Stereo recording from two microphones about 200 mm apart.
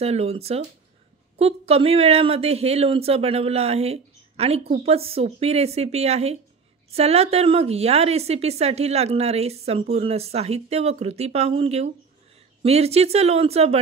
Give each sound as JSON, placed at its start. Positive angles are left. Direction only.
{"t": 0.0, "sound": "a woman's voice", "side_deg": -30}